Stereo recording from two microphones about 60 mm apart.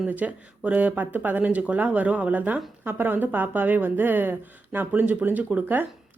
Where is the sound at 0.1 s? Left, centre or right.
Right.